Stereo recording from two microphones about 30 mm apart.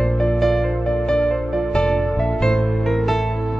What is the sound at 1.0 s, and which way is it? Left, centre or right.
Music, left.